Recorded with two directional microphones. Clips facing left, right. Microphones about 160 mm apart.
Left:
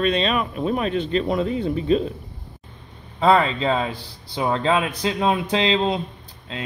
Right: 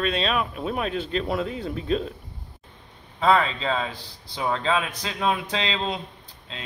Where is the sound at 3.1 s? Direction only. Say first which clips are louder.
Left 3 dB; 35° left (ahead or behind).